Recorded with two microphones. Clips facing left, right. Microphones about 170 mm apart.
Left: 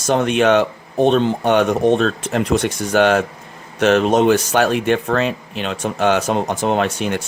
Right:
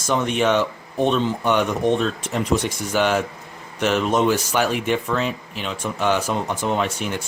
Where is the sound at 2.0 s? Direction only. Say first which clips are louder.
Left 5 dB; 75° left (ahead or behind).